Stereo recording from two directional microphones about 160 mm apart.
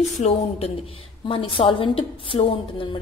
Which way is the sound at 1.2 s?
35° left (ahead or behind).